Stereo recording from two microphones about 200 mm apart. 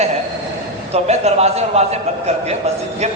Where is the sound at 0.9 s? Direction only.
35° right (ahead or behind).